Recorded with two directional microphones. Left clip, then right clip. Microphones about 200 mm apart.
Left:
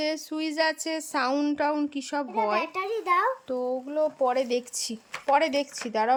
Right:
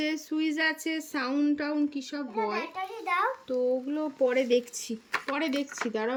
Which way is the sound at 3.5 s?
5° left (ahead or behind).